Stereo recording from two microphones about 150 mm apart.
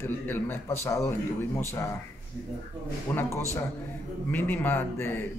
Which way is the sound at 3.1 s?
20° left (ahead or behind).